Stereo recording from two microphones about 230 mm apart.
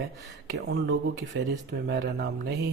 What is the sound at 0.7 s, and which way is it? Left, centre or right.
Speech, right.